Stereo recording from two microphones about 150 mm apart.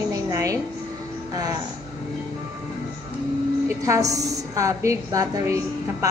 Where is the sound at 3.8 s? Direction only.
20° right (ahead or behind).